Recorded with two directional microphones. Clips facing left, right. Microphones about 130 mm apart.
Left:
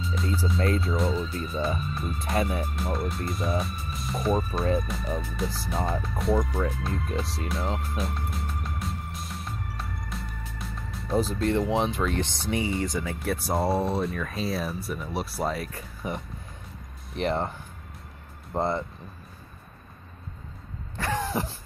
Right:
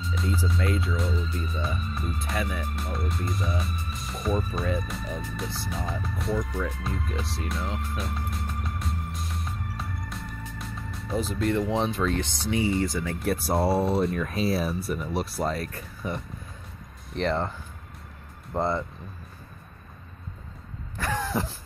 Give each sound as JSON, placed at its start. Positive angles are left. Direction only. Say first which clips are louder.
{"t": 0.0, "sound": "speech", "louder": "even", "side_deg": 0}
{"t": 8.0, "sound": "music", "louder": "left 1 dB", "side_deg": 0}
{"t": 11.4, "sound": "speech", "louder": "right 2 dB", "side_deg": 25}
{"t": 13.2, "sound": "speech", "louder": "right 2 dB", "side_deg": 0}
{"t": 17.2, "sound": "speech", "louder": "even", "side_deg": 15}
{"t": 18.5, "sound": "speech", "louder": "even", "side_deg": 20}
{"t": 20.9, "sound": "throat clearing", "louder": "even", "side_deg": 25}